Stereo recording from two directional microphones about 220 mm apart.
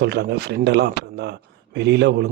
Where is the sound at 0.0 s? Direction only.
50° right (ahead or behind).